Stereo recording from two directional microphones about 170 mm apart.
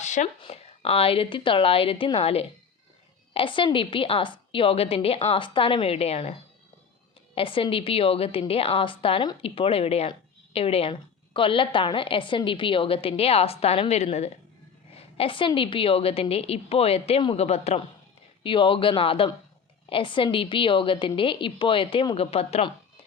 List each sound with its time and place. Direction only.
0.0 s a sound: 45° left (ahead or behind)
0.4 s a woman's voice: 35° left (ahead or behind)
7.3 s a woman's voice: 30° left (ahead or behind)